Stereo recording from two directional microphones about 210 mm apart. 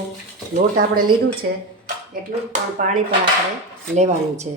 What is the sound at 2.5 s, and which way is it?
A woman's voice, 35° right (ahead or behind).